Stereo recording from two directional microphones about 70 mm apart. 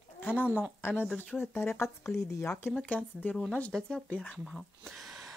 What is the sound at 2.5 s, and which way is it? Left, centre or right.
Speech, left.